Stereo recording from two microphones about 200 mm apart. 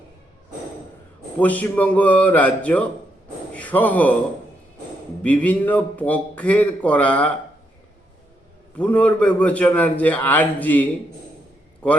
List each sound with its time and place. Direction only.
1.4 s a man's voice: 5° left (ahead or behind)
5.2 s a man's voice: 5° left (ahead or behind)
8.8 s a man's voice: 5° left (ahead or behind)